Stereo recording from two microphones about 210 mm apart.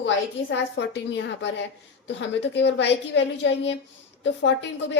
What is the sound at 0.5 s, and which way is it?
Speech, 55° left (ahead or behind).